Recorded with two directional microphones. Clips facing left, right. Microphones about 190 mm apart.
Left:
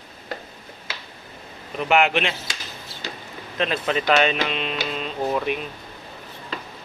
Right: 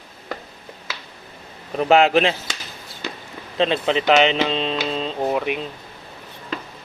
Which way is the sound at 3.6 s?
25° right (ahead or behind).